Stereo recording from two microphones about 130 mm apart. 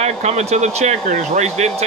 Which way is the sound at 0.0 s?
60° right (ahead or behind).